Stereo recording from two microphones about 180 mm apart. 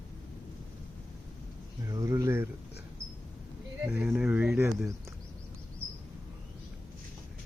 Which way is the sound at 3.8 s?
10° right (ahead or behind).